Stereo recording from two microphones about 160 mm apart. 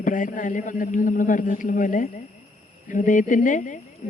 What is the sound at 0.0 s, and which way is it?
A woman's voice, 55° left (ahead or behind).